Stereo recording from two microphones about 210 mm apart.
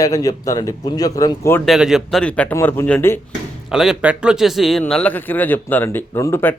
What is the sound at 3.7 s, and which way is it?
A man's voice, centre (ahead or behind).